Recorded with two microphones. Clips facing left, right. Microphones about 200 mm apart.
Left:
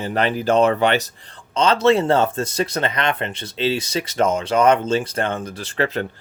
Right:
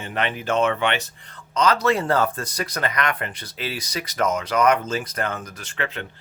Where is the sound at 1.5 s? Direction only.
25° left (ahead or behind).